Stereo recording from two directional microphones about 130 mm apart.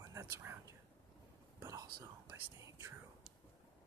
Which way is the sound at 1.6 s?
25° right (ahead or behind).